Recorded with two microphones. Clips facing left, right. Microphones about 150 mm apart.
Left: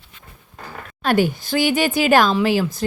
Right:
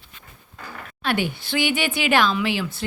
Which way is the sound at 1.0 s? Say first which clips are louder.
Left 6 dB; 40° left (ahead or behind).